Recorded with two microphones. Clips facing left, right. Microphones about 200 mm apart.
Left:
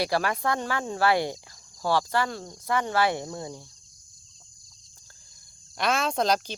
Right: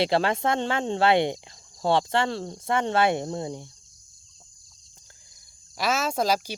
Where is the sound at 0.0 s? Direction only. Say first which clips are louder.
Right 3 dB; 25° right (ahead or behind).